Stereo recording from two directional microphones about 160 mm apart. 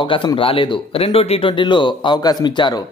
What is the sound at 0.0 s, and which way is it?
Speech, 30° left (ahead or behind).